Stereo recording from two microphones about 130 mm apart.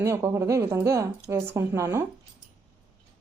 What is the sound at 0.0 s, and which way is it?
Speech, 25° right (ahead or behind).